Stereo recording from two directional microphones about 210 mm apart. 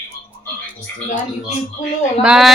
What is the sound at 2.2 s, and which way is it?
Speech, 5° right (ahead or behind).